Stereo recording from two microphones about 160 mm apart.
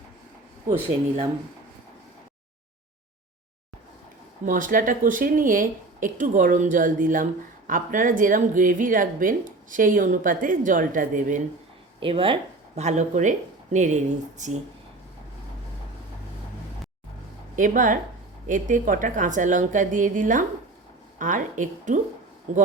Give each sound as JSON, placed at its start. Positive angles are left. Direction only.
{"t": 4.4, "sound": "speech", "side_deg": -55}
{"t": 11.9, "sound": "a woman's voice", "side_deg": -35}
{"t": 17.6, "sound": "a woman's voice", "side_deg": -55}